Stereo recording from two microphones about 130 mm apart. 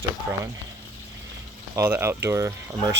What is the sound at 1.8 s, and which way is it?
Speech, 20° right (ahead or behind).